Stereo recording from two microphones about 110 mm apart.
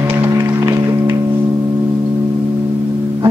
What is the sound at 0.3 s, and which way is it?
Music, 25° right (ahead or behind).